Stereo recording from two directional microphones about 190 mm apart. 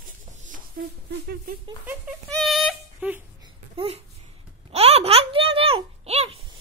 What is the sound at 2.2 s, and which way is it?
Child singing, centre (ahead or behind).